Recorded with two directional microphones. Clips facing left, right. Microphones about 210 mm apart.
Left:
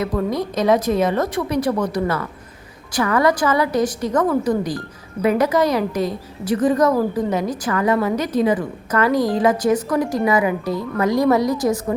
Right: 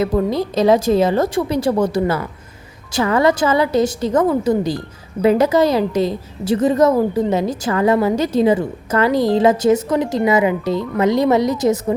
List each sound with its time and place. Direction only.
0.0 s a woman's voice: 25° right (ahead or behind)